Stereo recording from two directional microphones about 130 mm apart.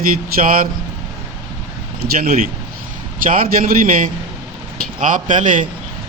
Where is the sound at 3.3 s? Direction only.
90° right.